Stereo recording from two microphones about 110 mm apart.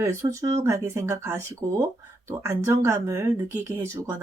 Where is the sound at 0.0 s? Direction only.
25° right (ahead or behind).